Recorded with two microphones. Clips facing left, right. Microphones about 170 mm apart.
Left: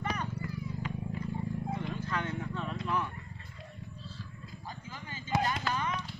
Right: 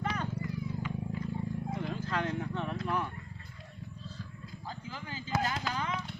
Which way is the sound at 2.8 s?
45° right (ahead or behind).